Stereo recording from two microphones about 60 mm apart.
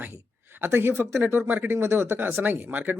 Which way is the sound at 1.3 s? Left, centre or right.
Right.